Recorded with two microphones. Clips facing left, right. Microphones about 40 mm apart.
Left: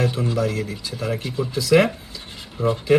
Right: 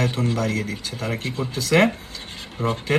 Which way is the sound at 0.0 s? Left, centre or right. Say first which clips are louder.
Left 1 dB; right.